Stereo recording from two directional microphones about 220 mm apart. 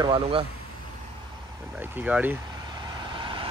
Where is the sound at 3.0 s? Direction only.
20° right (ahead or behind).